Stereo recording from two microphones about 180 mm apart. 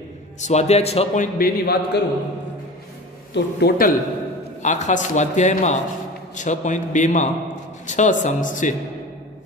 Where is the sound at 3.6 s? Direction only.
50° left (ahead or behind).